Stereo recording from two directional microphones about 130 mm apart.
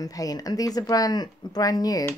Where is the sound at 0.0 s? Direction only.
30° left (ahead or behind).